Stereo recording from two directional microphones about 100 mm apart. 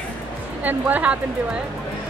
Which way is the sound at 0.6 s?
15° right (ahead or behind).